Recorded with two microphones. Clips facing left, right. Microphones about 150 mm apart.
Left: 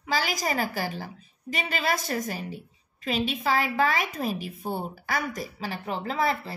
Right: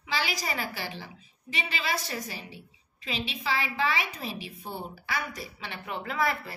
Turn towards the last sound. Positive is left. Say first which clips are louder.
# left 3 dB
turn(degrees=30)  # may be behind; listen again after turning